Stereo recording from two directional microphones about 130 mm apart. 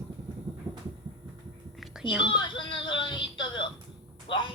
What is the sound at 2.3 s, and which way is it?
Music, 40° left (ahead or behind).